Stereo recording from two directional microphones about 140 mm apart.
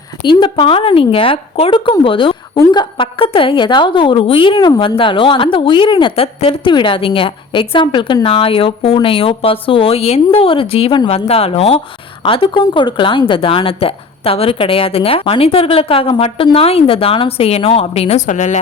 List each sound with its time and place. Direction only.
0.2 s a woman's voice: 35° left (ahead or behind)
18.3 s a woman's voice: 60° left (ahead or behind)